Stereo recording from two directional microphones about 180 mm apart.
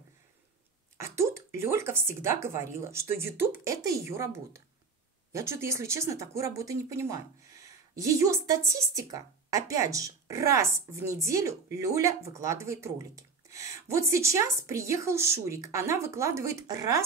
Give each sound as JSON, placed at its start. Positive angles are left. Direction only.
{"t": 0.9, "sound": "speech", "side_deg": -15}